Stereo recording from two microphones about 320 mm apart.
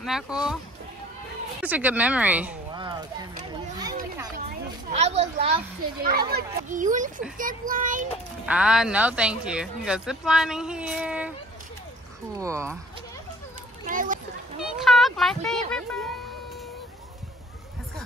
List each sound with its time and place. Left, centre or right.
0.0 s speech: centre
1.6 s speech: centre
4.9 s a child's voice: centre
8.5 s speech: centre
12.4 s speech: centre
13.8 s a child's voice: right
14.6 s a sound: centre
15.7 s speech: centre